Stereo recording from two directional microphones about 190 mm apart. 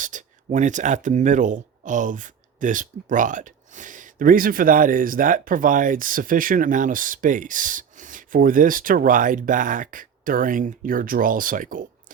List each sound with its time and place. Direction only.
0.0 s speech: 40° right (ahead or behind)